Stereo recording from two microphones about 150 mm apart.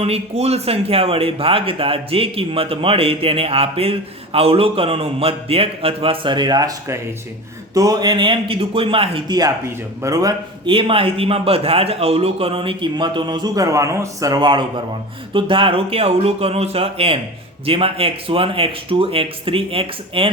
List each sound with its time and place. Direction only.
0.0 s speech: 45° right (ahead or behind)